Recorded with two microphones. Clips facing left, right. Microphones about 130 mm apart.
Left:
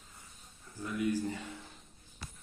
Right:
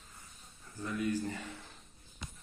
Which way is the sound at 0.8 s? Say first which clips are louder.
Left 1 dB; 15° left (ahead or behind).